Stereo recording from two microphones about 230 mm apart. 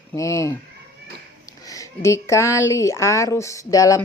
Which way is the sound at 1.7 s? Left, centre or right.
Centre.